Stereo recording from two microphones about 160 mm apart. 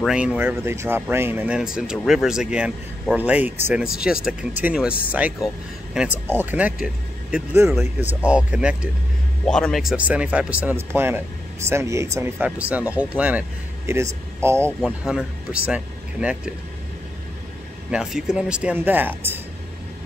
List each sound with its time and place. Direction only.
0.0 s speech: 5° right (ahead or behind)
9.5 s speech: 5° left (ahead or behind); by 14.7 s 15° right (ahead or behind)
14.9 s speech: 5° right (ahead or behind)
17.9 s speech: 5° right (ahead or behind)